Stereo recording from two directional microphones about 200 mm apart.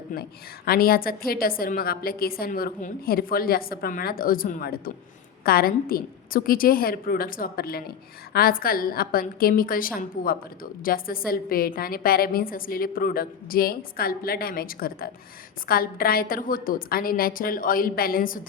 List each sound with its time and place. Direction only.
0.1 s a woman's voice: 50° left (ahead or behind)